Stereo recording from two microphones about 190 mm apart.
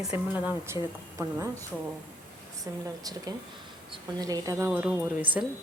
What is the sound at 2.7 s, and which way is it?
A woman's voice, 15° right (ahead or behind).